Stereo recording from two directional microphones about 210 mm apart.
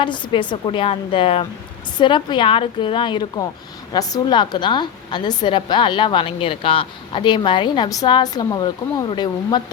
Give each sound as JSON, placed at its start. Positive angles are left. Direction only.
{"t": 0.0, "sound": "a woman's voice", "side_deg": 25}